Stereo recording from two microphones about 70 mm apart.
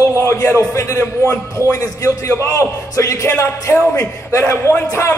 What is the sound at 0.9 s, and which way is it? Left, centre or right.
Speech, left.